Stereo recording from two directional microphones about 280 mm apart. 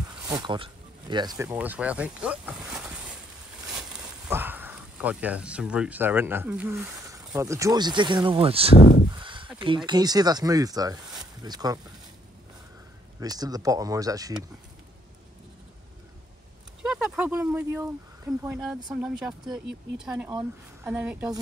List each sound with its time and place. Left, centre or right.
0.2 s speech: centre
9.1 s a sound: centre
9.8 s speech: centre
13.2 s speech: centre
16.8 s speech: centre